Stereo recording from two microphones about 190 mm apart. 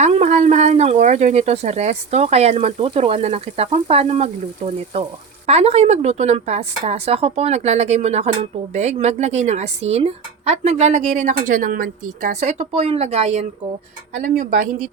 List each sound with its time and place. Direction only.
0.0 s a woman's voice: 35° right (ahead or behind)